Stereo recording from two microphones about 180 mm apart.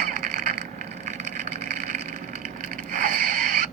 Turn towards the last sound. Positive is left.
turn(degrees=-45)  # may be behind; listen again after turning